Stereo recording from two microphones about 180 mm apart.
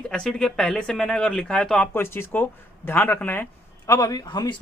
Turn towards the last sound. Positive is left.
turn(degrees=25)  # may be behind; listen again after turning